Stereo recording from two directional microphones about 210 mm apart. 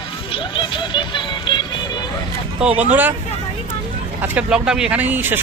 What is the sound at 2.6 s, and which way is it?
Speech, 5° right (ahead or behind).